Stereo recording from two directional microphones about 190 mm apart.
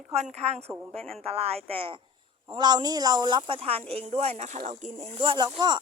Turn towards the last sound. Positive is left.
turn(degrees=-20)  # may be behind; listen again after turning